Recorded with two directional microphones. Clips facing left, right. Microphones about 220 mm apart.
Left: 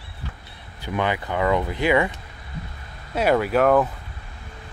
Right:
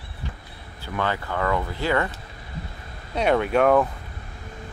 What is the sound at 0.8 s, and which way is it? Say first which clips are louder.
Speech: left 3 dB; 15° left (ahead or behind).